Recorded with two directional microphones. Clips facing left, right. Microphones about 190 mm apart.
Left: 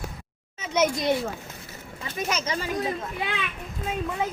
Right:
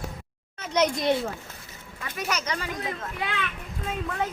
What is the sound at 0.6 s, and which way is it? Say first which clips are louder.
Speech: even; 5° left (ahead or behind).